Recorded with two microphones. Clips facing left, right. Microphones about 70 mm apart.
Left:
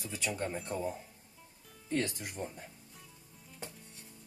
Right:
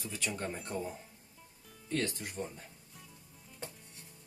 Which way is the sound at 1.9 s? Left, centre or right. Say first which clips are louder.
Left 1 dB; centre.